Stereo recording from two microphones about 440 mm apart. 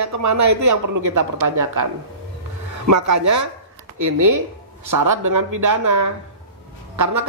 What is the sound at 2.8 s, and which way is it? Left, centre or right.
A woman's voice, right.